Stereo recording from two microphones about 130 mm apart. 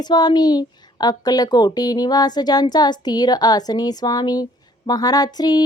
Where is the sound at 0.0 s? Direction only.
35° left (ahead or behind).